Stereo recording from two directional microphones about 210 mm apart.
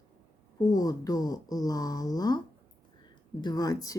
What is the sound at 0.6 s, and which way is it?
Speech, 20° left (ahead or behind).